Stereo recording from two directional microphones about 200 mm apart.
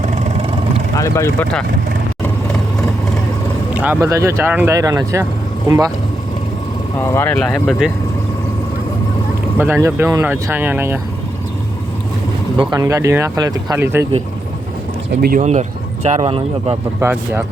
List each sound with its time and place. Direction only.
0.0 s vehicle: 35° right (ahead or behind)
0.9 s speech: 15° left (ahead or behind)
3.8 s speech: 10° right (ahead or behind)
7.0 s speech: 15° left (ahead or behind)
9.6 s speech: 10° right (ahead or behind)
12.5 s speech: 20° right (ahead or behind)
15.2 s speech: 45° right (ahead or behind)
17.0 s speech: 10° right (ahead or behind)